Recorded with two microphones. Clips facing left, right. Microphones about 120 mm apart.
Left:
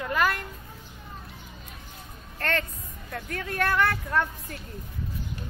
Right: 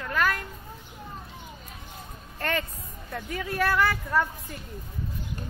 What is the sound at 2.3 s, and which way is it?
A woman's voice, 15° right (ahead or behind).